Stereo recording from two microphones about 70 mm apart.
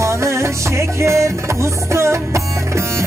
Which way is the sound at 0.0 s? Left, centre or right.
Right.